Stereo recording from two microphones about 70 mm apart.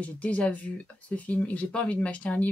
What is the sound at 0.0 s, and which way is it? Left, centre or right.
Speech, centre.